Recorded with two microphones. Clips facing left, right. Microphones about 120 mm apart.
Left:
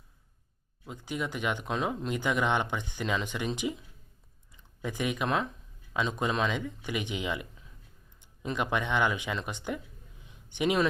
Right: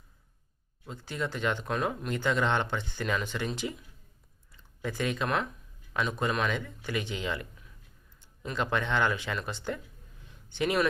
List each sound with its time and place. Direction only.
0.9 s speech: 15° left (ahead or behind)